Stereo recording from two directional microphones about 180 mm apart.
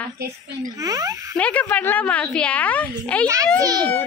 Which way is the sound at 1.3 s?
5° left (ahead or behind).